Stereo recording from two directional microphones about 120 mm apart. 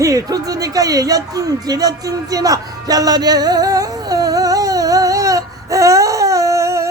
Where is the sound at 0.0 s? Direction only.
30° right (ahead or behind).